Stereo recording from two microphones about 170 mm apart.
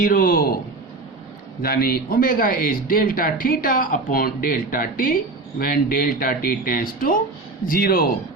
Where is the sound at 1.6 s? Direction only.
60° left (ahead or behind).